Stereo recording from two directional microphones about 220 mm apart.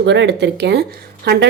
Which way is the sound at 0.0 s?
50° right (ahead or behind).